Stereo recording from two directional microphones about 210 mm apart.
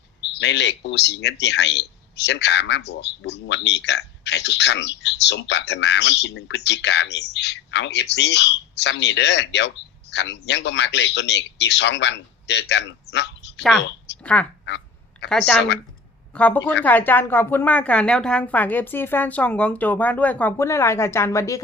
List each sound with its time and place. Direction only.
0.3 s speech: 55° left (ahead or behind)
13.6 s a woman's voice: centre (ahead or behind)
14.1 s a sound: 55° left (ahead or behind)
15.3 s a woman's voice: centre (ahead or behind)